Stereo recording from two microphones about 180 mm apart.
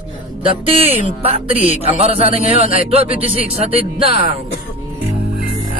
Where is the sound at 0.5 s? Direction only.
30° right (ahead or behind).